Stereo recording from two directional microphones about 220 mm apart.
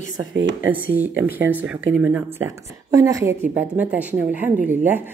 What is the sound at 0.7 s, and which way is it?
Speech, 10° right (ahead or behind).